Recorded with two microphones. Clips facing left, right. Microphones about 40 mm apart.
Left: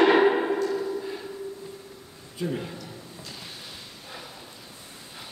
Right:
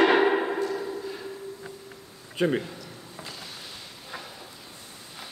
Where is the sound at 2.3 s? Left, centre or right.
Right.